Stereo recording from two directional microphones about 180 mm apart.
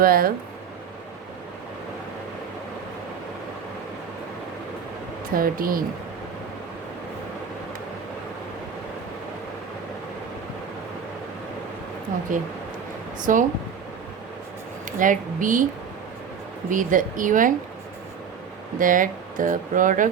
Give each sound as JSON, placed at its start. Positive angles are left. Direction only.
{"t": 0.0, "sound": "speech", "side_deg": -55}
{"t": 5.3, "sound": "speech", "side_deg": -55}
{"t": 13.1, "sound": "speech", "side_deg": -45}
{"t": 14.9, "sound": "speech", "side_deg": -45}
{"t": 16.6, "sound": "speech", "side_deg": -45}
{"t": 18.8, "sound": "speech", "side_deg": -50}